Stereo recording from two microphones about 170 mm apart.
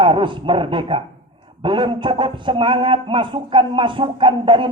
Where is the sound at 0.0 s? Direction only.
30° right (ahead or behind).